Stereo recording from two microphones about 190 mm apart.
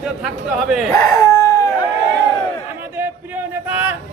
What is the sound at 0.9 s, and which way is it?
Howl, 20° left (ahead or behind).